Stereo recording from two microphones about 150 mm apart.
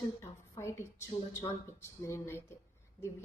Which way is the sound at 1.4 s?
20° left (ahead or behind).